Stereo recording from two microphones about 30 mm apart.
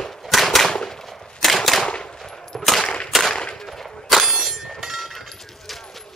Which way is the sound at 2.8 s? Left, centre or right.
Left.